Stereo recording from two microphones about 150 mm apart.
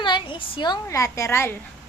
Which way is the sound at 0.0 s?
35° left (ahead or behind).